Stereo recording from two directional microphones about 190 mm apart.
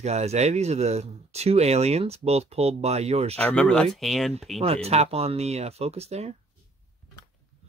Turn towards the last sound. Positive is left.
turn(degrees=-35)  # may be behind; listen again after turning